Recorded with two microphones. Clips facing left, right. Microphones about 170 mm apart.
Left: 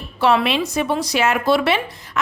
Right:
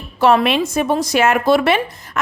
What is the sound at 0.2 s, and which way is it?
Speech, 45° right (ahead or behind).